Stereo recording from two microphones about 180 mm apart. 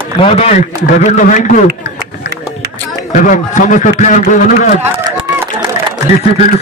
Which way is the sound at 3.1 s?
45° left (ahead or behind).